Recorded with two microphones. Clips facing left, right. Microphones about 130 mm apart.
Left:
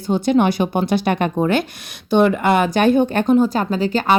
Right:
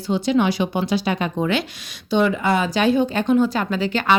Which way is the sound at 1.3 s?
45° left (ahead or behind).